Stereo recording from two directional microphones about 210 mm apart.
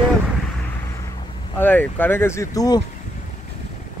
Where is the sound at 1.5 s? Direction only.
10° left (ahead or behind).